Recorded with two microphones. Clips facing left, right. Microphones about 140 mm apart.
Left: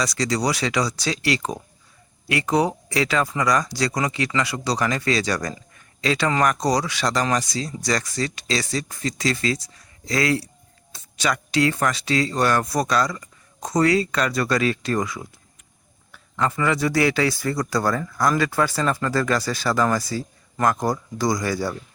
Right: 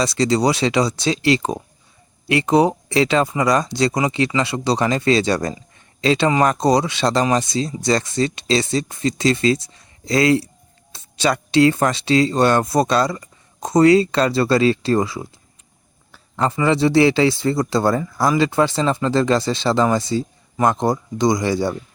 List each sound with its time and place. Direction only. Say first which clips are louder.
0.0 s speech: right 6 dB; 25° right (ahead or behind)
16.1 s a sound: right 3 dB; 30° right (ahead or behind)
16.6 s speech: right 7 dB; 25° right (ahead or behind)